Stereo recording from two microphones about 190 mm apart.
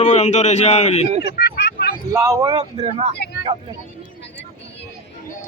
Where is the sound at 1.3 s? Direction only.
60° left (ahead or behind).